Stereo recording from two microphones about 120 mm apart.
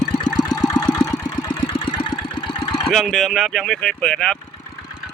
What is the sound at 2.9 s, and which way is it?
Speech, centre (ahead or behind).